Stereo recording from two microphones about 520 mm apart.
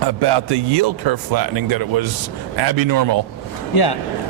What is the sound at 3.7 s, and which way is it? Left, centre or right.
Speech, left.